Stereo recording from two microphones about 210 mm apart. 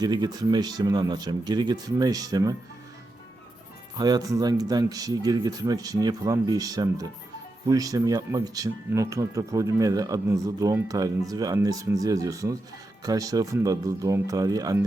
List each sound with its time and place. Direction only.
0.0 s speech: 20° right (ahead or behind)
3.9 s speech: 20° right (ahead or behind)